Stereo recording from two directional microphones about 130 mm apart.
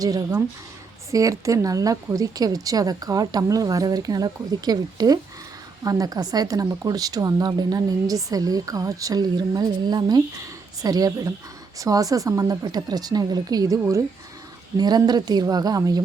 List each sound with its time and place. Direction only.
0.0 s speech: 30° right (ahead or behind)